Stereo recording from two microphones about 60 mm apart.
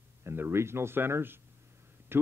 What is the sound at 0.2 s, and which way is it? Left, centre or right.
Speech, right.